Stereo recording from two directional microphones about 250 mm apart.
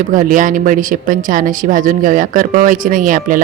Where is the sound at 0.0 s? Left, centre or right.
Right.